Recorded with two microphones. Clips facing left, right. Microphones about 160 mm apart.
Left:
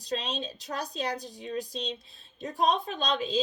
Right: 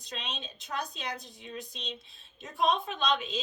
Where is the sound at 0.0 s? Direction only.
35° left (ahead or behind).